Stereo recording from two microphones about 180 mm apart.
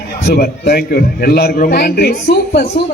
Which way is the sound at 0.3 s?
65° left (ahead or behind).